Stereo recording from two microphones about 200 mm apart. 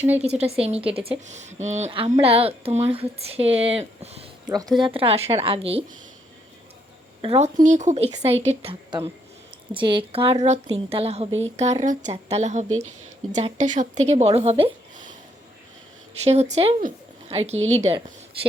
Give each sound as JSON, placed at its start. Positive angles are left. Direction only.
{"t": 0.2, "sound": "speech", "side_deg": -30}
{"t": 4.4, "sound": "speech", "side_deg": -20}
{"t": 7.2, "sound": "speech", "side_deg": -30}
{"t": 16.2, "sound": "a woman's voice", "side_deg": -35}